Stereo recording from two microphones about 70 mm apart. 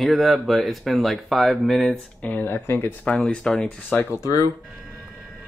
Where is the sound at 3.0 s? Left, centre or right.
Centre.